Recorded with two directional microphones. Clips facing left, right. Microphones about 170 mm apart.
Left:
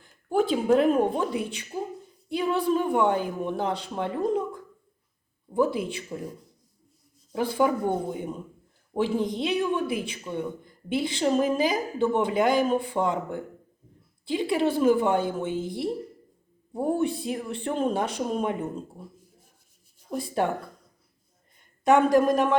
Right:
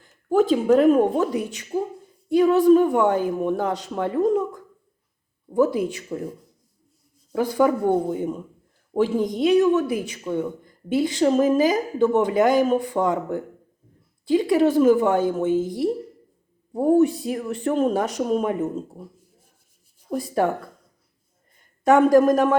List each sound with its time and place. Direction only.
0.0 s speech: 45° right (ahead or behind)
7.4 s speech: 40° right (ahead or behind)
9.0 s speech: 40° right (ahead or behind)
20.1 s speech: 40° right (ahead or behind)
21.8 s speech: 45° right (ahead or behind)